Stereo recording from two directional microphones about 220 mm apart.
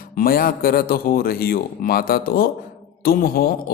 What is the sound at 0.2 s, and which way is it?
A man's voice, 40° left (ahead or behind).